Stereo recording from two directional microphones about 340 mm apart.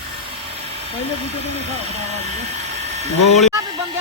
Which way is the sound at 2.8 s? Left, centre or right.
Centre.